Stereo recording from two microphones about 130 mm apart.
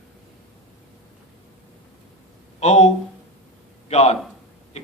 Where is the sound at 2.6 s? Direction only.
60° left (ahead or behind).